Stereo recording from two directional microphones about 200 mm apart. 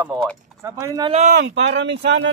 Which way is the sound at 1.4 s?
60° right (ahead or behind).